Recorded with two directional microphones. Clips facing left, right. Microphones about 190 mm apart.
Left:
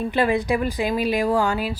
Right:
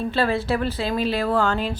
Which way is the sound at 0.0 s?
15° left (ahead or behind).